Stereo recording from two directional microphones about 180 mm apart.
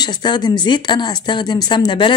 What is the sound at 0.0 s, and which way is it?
Speech, 25° left (ahead or behind).